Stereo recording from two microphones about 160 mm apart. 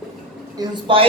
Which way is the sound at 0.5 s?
25° right (ahead or behind).